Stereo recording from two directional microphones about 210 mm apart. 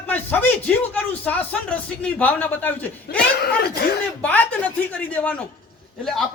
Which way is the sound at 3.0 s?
50° left (ahead or behind).